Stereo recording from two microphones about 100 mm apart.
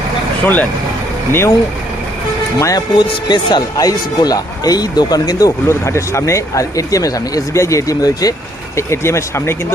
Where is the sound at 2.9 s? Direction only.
45° left (ahead or behind).